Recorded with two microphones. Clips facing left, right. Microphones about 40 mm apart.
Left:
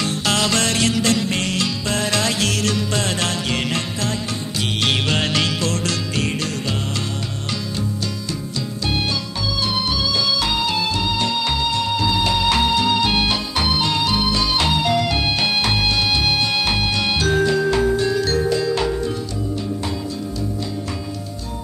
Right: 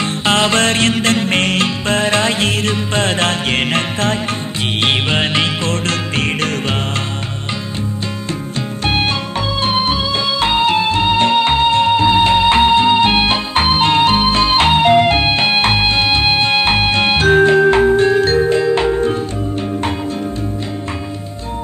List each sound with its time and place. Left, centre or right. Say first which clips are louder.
0.0 s music: right 5 dB; right
4.8 s music: right 4 dB; right
9.6 s music: right 5 dB; right